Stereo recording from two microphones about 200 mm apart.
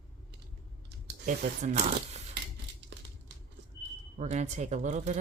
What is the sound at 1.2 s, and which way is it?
Speech, 40° right (ahead or behind).